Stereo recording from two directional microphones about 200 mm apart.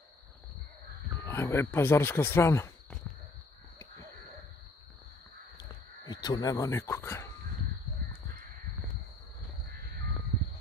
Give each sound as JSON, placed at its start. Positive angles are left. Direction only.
{"t": 1.2, "sound": "speech", "side_deg": 10}
{"t": 6.0, "sound": "speech", "side_deg": 20}